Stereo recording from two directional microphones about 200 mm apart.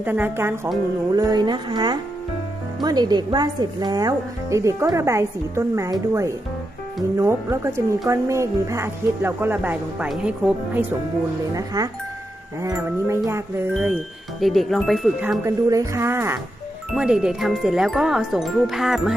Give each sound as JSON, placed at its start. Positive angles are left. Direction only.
{"t": 0.0, "sound": "speech", "side_deg": -10}
{"t": 11.5, "sound": "speech", "side_deg": -20}
{"t": 14.4, "sound": "chime", "side_deg": 0}
{"t": 15.2, "sound": "speech", "side_deg": -10}
{"t": 16.9, "sound": "chime", "side_deg": -5}